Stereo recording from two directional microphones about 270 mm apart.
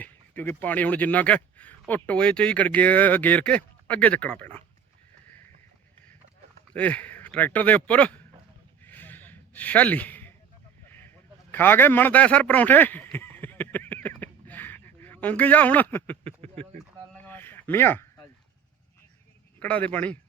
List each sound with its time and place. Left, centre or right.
0.0 s speech: centre
6.7 s a man's voice: centre
8.8 s a sound: centre
16.4 s speech: right
17.2 s a sound: centre
19.5 s speech: centre